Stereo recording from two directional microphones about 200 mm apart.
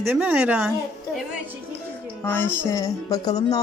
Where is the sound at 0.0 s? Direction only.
10° right (ahead or behind).